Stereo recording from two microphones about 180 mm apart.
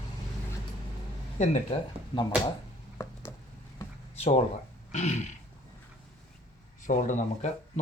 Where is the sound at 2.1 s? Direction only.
20° left (ahead or behind).